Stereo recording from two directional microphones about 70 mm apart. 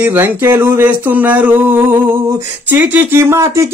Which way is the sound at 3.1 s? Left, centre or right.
Right.